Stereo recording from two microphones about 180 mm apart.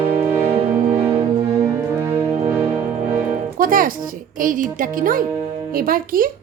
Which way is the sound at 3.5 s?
50° right (ahead or behind).